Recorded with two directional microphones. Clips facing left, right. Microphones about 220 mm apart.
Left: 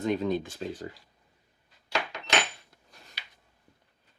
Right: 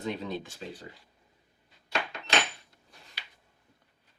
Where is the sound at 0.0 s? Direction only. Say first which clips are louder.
Left 7 dB; 45° left (ahead or behind).